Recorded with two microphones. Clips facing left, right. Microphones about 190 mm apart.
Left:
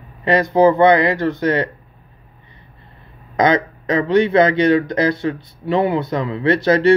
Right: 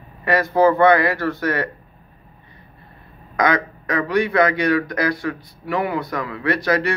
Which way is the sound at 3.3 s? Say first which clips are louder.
Left 4 dB; 25° left (ahead or behind).